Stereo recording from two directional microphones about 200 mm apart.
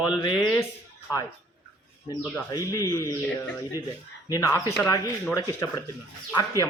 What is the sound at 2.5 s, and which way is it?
Speech, 15° left (ahead or behind).